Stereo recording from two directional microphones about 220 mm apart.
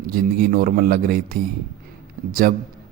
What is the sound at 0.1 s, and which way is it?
A man's voice, 45° right (ahead or behind).